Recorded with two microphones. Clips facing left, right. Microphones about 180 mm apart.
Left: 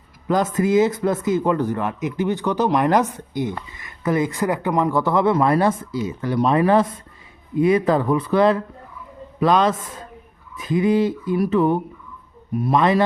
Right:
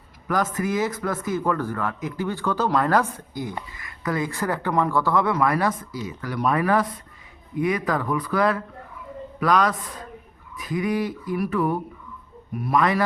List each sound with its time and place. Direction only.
0.3 s speech: 25° left (ahead or behind)